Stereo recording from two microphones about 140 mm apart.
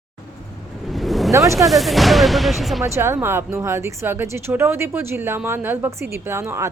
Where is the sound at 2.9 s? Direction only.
20° right (ahead or behind).